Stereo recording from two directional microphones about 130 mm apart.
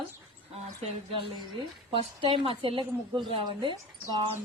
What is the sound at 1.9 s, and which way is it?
A woman's voice, 45° right (ahead or behind).